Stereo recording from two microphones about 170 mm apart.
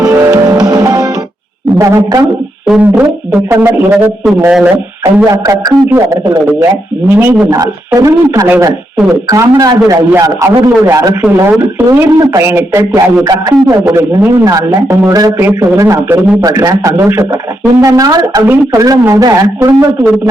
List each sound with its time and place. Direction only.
0.0 s music: 15° right (ahead or behind)
2.6 s speech: 5° right (ahead or behind)
8.5 s speech: 10° right (ahead or behind)
9.3 s a man's voice: 20° right (ahead or behind)